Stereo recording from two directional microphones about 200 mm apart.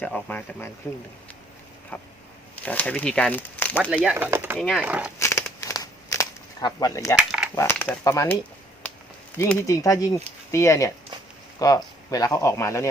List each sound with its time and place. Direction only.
0.0 s speech: 5° left (ahead or behind)
1.9 s speech: 10° left (ahead or behind)
4.1 s speech: 10° right (ahead or behind)
5.2 s crumpling: 15° left (ahead or behind)
7.2 s a sound: 5° right (ahead or behind)
7.5 s speech: 15° left (ahead or behind)
9.4 s speech: 15° left (ahead or behind)